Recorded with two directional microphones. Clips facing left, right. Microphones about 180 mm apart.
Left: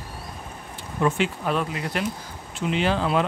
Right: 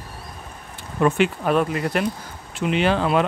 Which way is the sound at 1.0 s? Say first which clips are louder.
Right 4 dB; 55° right (ahead or behind).